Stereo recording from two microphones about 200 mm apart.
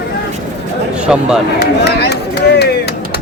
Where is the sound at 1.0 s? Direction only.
5° right (ahead or behind).